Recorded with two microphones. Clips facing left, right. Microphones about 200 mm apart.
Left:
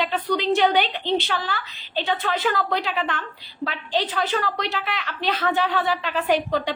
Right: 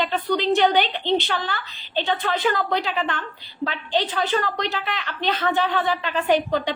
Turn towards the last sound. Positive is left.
turn(degrees=0)  # may be behind; listen again after turning